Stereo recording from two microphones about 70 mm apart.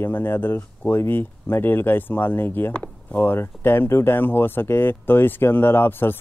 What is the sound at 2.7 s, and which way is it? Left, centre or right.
Speech, centre.